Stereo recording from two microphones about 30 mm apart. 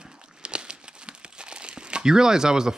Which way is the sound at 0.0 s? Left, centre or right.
Right.